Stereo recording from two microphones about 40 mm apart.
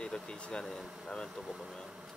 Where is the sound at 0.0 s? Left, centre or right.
Left.